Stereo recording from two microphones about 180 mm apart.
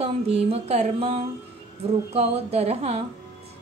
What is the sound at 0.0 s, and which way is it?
A woman's voice, 35° right (ahead or behind).